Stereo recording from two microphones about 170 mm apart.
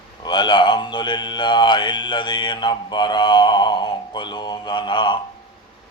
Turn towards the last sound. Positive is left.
turn(degrees=25)  # may be behind; listen again after turning